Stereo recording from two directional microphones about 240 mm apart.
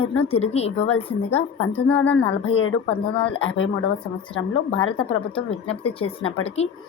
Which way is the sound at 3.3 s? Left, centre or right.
Left.